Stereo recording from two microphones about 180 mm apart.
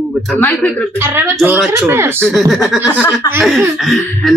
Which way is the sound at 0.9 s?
15° right (ahead or behind).